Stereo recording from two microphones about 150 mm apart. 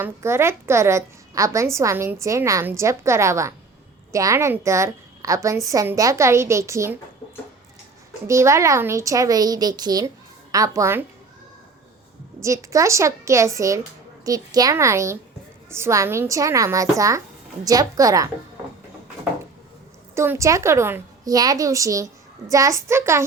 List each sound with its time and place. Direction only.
0.0 s a woman's voice: 15° right (ahead or behind)
8.3 s a woman's voice: 20° right (ahead or behind)
12.4 s a woman's voice: 20° right (ahead or behind)
20.1 s a woman's voice: 15° right (ahead or behind)